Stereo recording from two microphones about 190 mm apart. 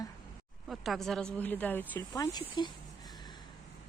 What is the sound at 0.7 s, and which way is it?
A woman's voice, centre (ahead or behind).